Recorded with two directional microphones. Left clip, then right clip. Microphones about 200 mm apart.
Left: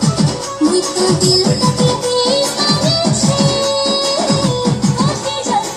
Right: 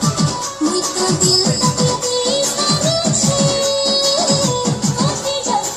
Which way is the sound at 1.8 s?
65° right (ahead or behind).